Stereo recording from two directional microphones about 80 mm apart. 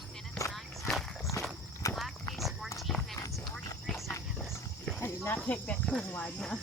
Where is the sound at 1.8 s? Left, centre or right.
Left.